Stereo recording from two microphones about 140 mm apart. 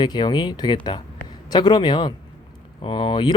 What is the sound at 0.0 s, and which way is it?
Speech, 30° left (ahead or behind).